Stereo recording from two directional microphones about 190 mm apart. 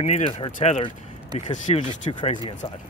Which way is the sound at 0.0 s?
35° left (ahead or behind).